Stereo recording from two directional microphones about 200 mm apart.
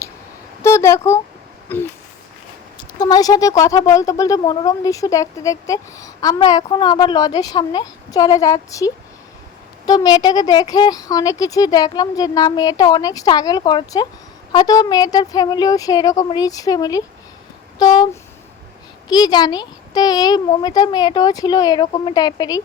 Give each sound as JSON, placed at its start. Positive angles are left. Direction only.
{"t": 0.6, "sound": "a sound", "side_deg": 15}
{"t": 1.7, "sound": "speech", "side_deg": 10}
{"t": 3.0, "sound": "speech", "side_deg": 20}